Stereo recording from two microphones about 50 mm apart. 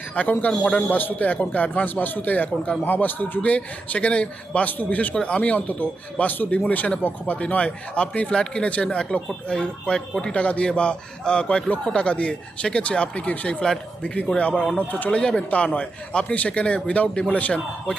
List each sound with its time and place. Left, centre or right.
0.1 s speech: left
0.5 s speech: centre
0.8 s a man's voice: left
5.1 s a man's voice: left
10.3 s a man's voice: left
14.8 s a man's voice: left
15.1 s a man's voice: centre